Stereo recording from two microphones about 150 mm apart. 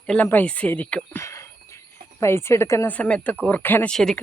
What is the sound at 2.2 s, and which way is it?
Speech, 15° left (ahead or behind).